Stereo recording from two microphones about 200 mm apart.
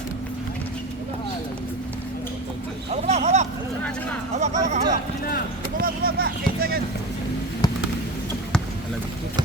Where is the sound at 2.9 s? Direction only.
35° right (ahead or behind).